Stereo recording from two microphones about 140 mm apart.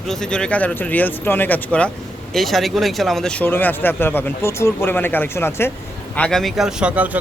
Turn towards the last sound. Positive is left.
turn(degrees=-10)  # may be behind; listen again after turning